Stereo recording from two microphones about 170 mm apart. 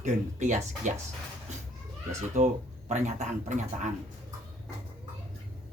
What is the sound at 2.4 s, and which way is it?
Speech, 45° right (ahead or behind).